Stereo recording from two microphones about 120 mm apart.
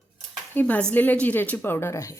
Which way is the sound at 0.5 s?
15° left (ahead or behind).